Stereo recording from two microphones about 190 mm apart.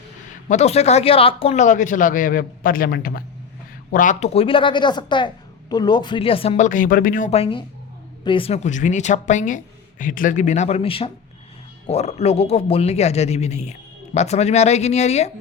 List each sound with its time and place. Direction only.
0.4 s a man's voice: 35° left (ahead or behind)